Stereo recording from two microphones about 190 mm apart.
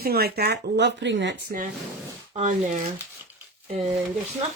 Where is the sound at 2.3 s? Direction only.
40° right (ahead or behind).